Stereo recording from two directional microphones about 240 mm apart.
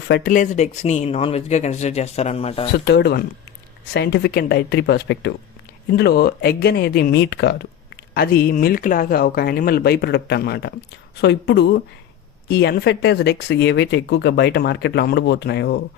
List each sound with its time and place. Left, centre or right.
0.1 s speech: left
2.7 s speech: left